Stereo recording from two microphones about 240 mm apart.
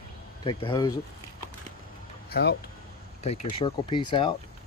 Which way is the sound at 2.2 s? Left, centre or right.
Left.